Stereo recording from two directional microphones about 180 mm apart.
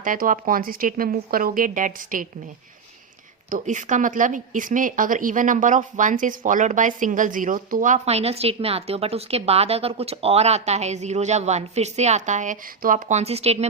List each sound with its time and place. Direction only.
0.0 s speech: 50° right (ahead or behind)
3.5 s speech: 45° right (ahead or behind)